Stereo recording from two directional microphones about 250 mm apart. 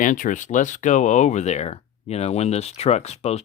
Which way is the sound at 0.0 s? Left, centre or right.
Left.